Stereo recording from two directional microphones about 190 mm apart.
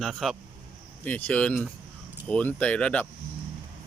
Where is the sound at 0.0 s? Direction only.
Centre (ahead or behind).